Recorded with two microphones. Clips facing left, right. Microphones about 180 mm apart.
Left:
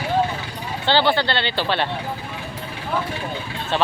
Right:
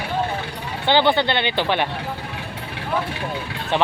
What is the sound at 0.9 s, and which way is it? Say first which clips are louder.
Speech: right 2 dB; 20° right (ahead or behind).